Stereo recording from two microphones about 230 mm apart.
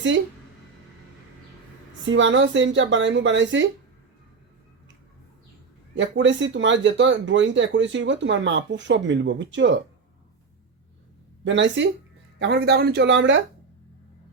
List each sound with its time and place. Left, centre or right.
2.0 s speech: right
5.9 s speech: right
11.4 s speech: right